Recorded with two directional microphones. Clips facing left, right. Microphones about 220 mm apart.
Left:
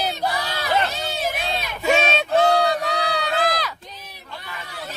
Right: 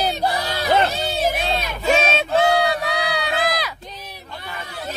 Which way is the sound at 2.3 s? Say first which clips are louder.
Left 1 dB; 10° right (ahead or behind).